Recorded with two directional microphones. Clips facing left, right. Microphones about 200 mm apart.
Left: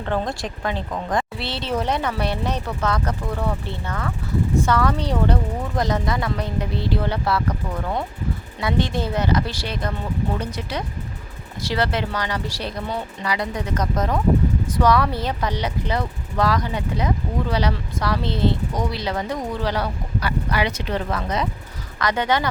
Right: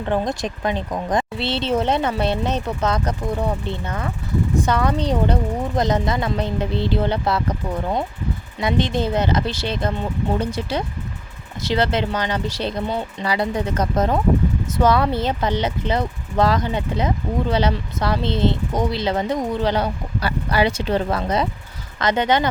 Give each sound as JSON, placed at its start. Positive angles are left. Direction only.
{"t": 0.0, "sound": "speech", "side_deg": -20}